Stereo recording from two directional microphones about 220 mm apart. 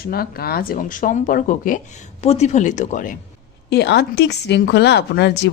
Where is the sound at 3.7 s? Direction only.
50° left (ahead or behind).